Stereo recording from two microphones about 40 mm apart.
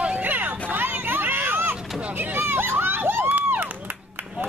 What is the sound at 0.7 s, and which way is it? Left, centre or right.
Vehicle, right.